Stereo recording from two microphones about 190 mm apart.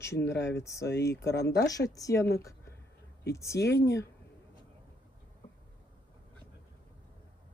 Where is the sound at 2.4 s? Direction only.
15° left (ahead or behind).